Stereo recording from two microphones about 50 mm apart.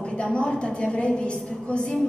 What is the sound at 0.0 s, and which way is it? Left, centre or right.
A woman's voice, centre.